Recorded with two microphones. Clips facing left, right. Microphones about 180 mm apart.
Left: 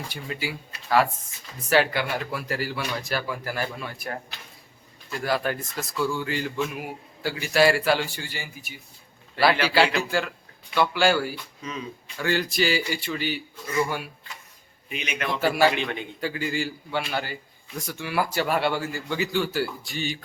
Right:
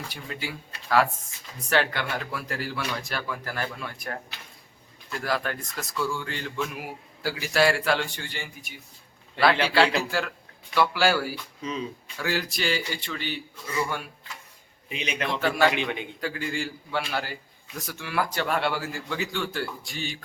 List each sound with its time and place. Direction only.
0.1 s a man's voice: 5° left (ahead or behind)
5.2 s a man's voice: 5° left (ahead or behind)
14.8 s a man's voice: 30° right (ahead or behind)
15.3 s a man's voice: 5° left (ahead or behind)
15.7 s a man's voice: 15° right (ahead or behind)
16.2 s a man's voice: centre (ahead or behind)